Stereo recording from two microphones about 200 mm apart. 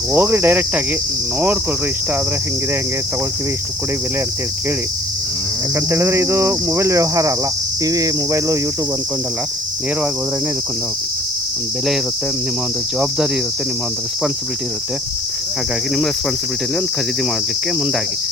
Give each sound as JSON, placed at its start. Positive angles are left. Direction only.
{"t": 0.1, "sound": "cricket", "side_deg": -10}
{"t": 5.9, "sound": "cricket", "side_deg": -15}